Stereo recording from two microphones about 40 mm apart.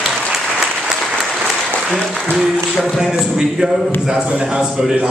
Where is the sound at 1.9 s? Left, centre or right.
Centre.